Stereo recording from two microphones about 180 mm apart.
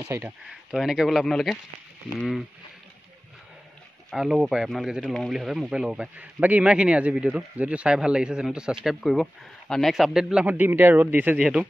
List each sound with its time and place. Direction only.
0.0 s speech: 15° right (ahead or behind)
0.5 s speech: 5° right (ahead or behind)
4.1 s speech: centre (ahead or behind)